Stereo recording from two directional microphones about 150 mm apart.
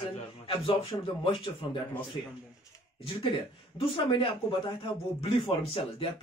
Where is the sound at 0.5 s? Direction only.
35° left (ahead or behind).